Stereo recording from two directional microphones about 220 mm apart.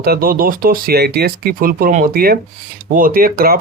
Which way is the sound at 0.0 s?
45° right (ahead or behind).